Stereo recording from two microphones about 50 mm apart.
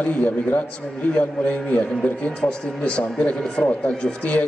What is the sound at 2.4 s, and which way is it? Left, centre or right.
Speech, left.